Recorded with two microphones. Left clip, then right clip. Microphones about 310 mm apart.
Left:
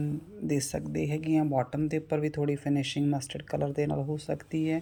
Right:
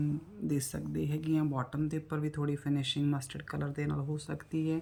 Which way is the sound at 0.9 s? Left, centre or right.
Right.